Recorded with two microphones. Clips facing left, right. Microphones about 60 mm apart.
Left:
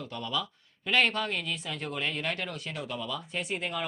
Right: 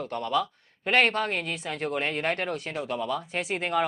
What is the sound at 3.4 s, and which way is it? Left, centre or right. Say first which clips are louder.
Speech: right 7 dB; right.